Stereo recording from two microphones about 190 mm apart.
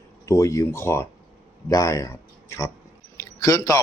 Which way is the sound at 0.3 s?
15° left (ahead or behind).